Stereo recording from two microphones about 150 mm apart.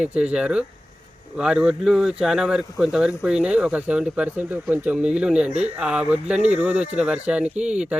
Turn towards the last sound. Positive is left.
turn(degrees=-5)  # may be behind; listen again after turning